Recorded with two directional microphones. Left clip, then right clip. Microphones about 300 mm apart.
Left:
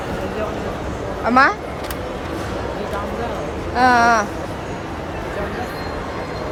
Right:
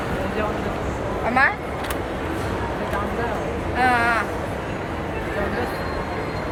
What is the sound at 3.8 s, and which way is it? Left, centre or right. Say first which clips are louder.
Speech: left 6 dB; centre.